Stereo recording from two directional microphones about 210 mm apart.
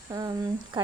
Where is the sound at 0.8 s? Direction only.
20° right (ahead or behind).